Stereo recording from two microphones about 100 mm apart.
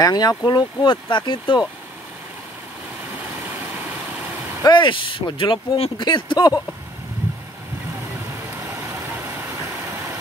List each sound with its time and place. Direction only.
0.0 s speech: 40° left (ahead or behind)
3.2 s vehicle: 20° right (ahead or behind)
4.6 s speech: 55° left (ahead or behind)
8.5 s vehicle: 25° right (ahead or behind)